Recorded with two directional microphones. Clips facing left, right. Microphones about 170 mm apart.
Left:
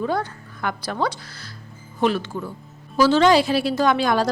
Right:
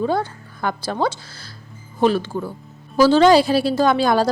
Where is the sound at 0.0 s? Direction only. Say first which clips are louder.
Right 3 dB; 30° right (ahead or behind).